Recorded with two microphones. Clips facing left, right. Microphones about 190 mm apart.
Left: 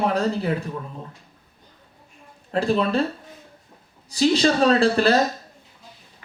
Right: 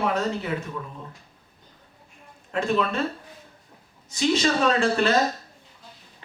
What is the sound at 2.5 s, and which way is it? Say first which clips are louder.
Speech: left 3 dB; 35° left (ahead or behind).